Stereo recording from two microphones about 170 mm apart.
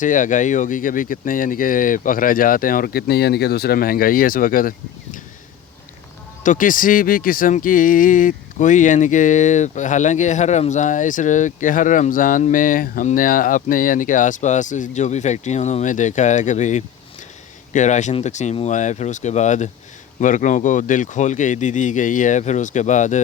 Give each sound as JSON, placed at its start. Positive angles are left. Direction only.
{"t": 0.0, "sound": "speech", "side_deg": 50}
{"t": 6.4, "sound": "speech", "side_deg": 50}